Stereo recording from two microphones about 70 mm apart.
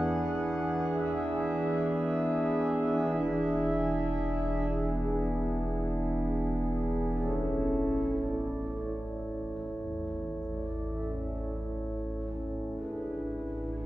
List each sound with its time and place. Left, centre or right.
0.0 s music: centre
1.1 s music: centre
1.8 s music: centre
2.3 s music: centre
3.5 s music: right
7.5 s music: centre